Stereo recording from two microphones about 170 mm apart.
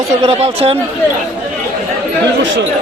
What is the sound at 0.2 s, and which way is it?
Speech, 35° right (ahead or behind).